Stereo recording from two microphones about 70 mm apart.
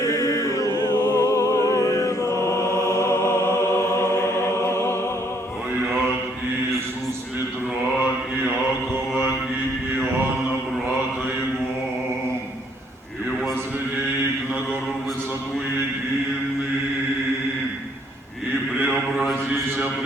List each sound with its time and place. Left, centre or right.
0.0 s a capella: left
0.8 s music: left
19.1 s a sound: centre